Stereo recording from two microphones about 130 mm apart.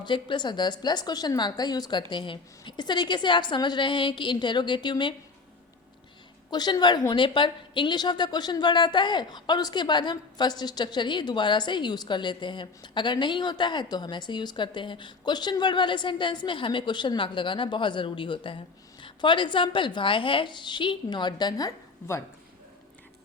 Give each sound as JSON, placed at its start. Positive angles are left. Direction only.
{"t": 0.0, "sound": "a woman's voice", "side_deg": 35}
{"t": 6.5, "sound": "a woman's voice", "side_deg": 30}